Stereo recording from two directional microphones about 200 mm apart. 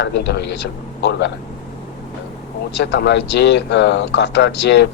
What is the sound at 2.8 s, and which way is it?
Speech, 60° left (ahead or behind).